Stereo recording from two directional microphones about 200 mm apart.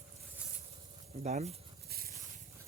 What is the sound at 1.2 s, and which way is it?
Speech, 35° right (ahead or behind).